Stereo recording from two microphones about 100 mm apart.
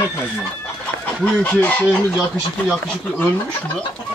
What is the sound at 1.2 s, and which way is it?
Speech, 15° left (ahead or behind).